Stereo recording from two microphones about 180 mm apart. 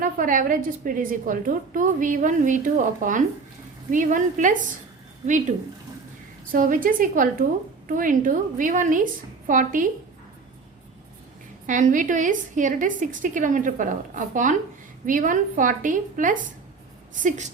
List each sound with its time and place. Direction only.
0.0 s a woman's voice: 50° right (ahead or behind)
11.6 s a woman's voice: 45° right (ahead or behind)